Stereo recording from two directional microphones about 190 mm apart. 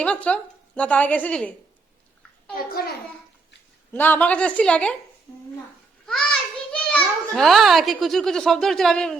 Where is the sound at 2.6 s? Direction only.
50° left (ahead or behind).